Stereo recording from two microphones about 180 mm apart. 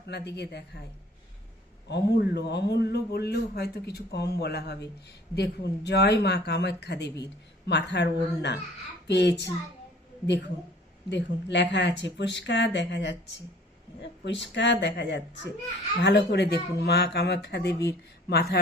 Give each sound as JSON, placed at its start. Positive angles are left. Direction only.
{"t": 0.1, "sound": "a man's voice", "side_deg": 70}
{"t": 1.9, "sound": "a man's voice", "side_deg": 70}